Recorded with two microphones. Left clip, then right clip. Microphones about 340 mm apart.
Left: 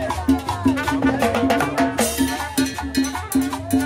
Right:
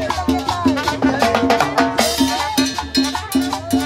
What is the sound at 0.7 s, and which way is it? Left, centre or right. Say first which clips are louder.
Music: right 3 dB; centre.